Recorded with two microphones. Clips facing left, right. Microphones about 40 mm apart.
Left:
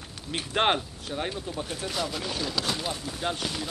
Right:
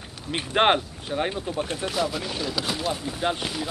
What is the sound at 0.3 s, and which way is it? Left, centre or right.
Speech, centre.